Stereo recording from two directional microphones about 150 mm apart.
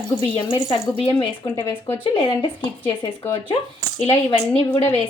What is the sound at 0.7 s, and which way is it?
Speech, 40° left (ahead or behind).